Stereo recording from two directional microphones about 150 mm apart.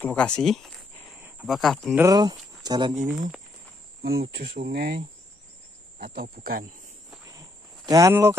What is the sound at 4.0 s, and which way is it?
Speech, 90° right.